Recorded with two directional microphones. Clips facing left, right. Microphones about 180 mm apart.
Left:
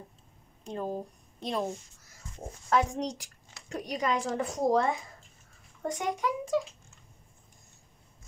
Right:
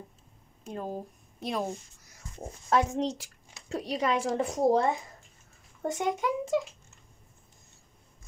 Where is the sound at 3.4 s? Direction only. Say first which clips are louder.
Right 3 dB; 25° right (ahead or behind).